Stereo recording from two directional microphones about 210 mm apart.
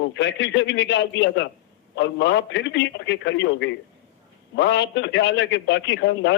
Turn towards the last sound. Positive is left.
turn(degrees=55)  # may be behind; listen again after turning